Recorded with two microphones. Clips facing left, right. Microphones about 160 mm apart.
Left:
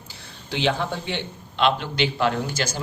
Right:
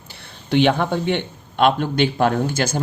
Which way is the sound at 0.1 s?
60° right (ahead or behind).